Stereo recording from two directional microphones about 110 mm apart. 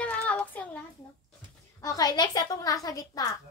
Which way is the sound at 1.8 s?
35° left (ahead or behind).